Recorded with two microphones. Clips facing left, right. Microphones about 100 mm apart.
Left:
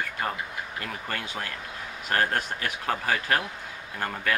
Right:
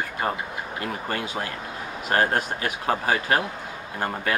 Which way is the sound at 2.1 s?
15° right (ahead or behind).